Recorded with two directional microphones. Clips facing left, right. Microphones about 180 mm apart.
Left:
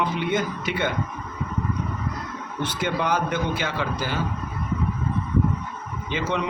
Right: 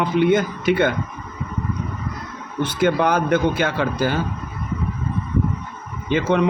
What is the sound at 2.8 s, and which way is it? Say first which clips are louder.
Speech: right 7 dB; 50° right (ahead or behind).